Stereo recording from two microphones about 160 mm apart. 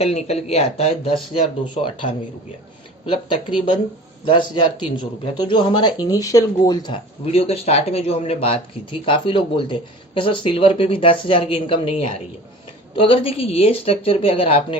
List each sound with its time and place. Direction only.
0.0 s speech: 40° left (ahead or behind)
3.1 s speech: 30° left (ahead or behind)